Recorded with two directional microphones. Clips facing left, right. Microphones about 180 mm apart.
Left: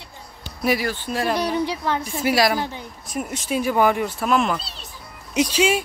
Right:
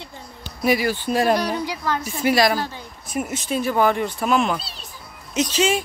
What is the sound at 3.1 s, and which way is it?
Speech, 5° right (ahead or behind).